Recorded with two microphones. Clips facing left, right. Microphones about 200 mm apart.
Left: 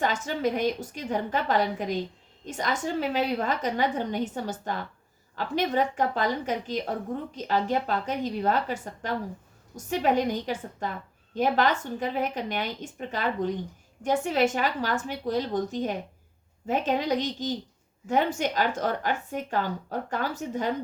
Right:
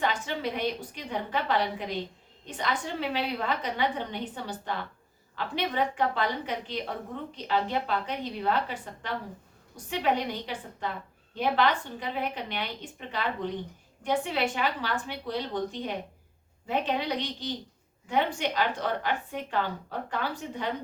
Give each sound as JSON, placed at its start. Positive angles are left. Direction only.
{"t": 0.0, "sound": "a woman's voice", "side_deg": 45}